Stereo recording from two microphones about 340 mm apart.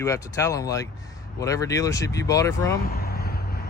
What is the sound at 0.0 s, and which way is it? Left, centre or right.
Speech, centre.